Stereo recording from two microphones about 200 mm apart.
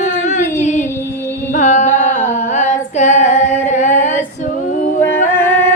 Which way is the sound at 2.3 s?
35° left (ahead or behind).